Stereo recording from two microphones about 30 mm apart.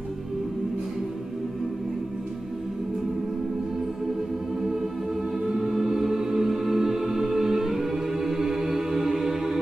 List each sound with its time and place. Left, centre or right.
4.6 s music: centre